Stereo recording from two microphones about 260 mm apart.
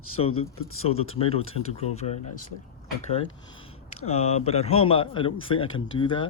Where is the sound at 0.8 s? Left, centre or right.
Left.